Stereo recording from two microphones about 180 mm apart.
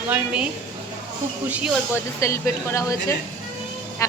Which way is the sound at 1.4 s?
10° right (ahead or behind).